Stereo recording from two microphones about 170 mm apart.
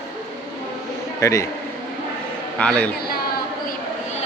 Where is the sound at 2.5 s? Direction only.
5° left (ahead or behind).